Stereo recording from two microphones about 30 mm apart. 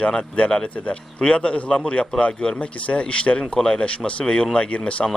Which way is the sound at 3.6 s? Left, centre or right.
Left.